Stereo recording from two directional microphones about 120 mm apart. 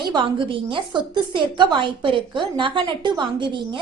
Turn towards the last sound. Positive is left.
turn(degrees=-40)  # may be behind; listen again after turning